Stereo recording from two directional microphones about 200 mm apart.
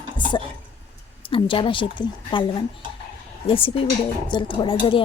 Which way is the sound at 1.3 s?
25° left (ahead or behind).